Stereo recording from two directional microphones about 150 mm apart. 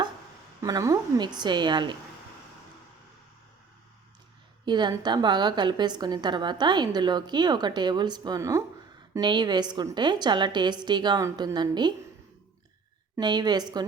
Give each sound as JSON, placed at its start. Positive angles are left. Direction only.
{"t": 0.6, "sound": "a woman's voice", "side_deg": -20}
{"t": 4.6, "sound": "a woman's voice", "side_deg": -30}
{"t": 9.1, "sound": "a woman's voice", "side_deg": -30}
{"t": 13.1, "sound": "a woman's voice", "side_deg": -30}